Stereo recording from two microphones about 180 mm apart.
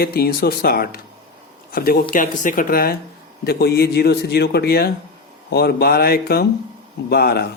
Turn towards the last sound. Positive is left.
turn(degrees=60)  # may be behind; listen again after turning